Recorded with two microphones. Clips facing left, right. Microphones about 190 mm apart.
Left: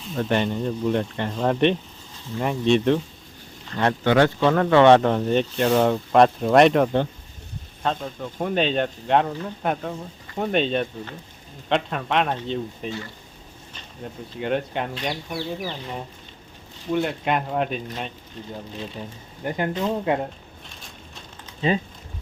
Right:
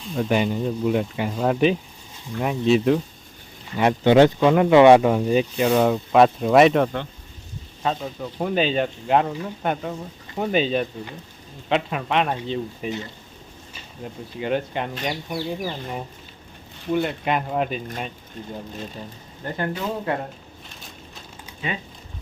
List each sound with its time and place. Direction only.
0.0 s speech: centre (ahead or behind)
16.9 s speech: centre (ahead or behind)
19.5 s speech: 15° left (ahead or behind)
21.6 s speech: 30° left (ahead or behind)